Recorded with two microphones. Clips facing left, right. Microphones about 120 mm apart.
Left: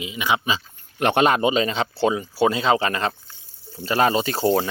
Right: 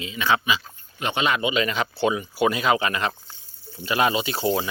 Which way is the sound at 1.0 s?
60° left (ahead or behind).